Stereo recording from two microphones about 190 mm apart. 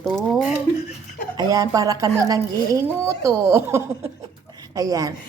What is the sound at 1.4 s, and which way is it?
A woman's voice, 20° right (ahead or behind).